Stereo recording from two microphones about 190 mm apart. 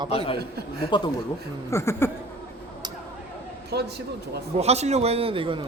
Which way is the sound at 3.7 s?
60° right (ahead or behind).